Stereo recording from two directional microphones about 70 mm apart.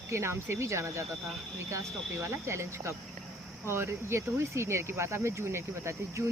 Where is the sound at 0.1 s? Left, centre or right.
Right.